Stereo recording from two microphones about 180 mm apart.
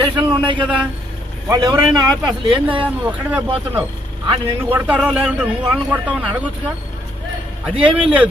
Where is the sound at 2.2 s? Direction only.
30° right (ahead or behind).